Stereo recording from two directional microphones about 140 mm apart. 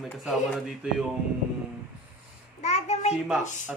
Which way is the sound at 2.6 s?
55° left (ahead or behind).